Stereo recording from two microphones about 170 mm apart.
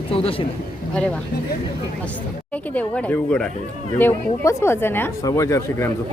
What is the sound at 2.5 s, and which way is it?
Speech, 10° left (ahead or behind).